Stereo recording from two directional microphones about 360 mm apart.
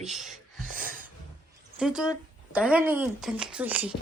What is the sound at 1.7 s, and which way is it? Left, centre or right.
Speech, centre.